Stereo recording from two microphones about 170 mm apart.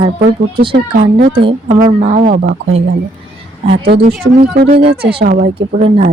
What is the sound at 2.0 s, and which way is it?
Speech, 50° right (ahead or behind).